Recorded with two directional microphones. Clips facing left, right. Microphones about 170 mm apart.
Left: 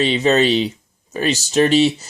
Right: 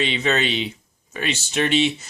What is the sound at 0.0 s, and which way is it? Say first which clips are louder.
Speech: left 7 dB; 35° left (ahead or behind).